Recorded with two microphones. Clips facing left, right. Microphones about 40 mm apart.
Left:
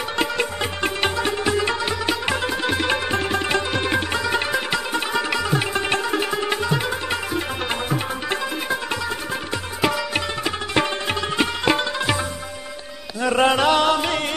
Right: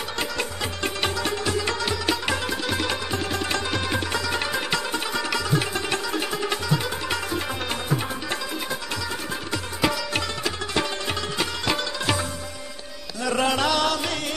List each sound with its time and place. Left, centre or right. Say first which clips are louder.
0.2 s music: left 6 dB; left
4.6 s music: left 3 dB; centre
9.8 s sitar: left 3 dB; centre
10.4 s sitar: left 4 dB; left
13.2 s music: left 5 dB; left